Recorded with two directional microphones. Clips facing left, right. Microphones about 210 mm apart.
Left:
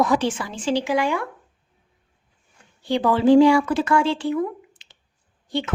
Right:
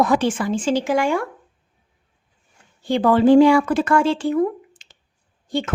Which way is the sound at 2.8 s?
50° right (ahead or behind).